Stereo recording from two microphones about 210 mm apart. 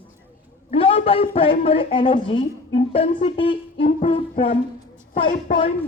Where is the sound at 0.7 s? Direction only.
25° left (ahead or behind).